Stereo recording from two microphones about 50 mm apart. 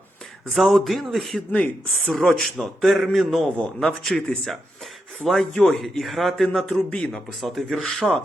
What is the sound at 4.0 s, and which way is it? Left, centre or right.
Speech, centre.